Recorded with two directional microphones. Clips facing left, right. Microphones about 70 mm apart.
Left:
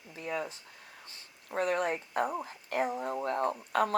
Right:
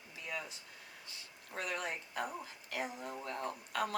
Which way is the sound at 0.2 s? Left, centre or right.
Left.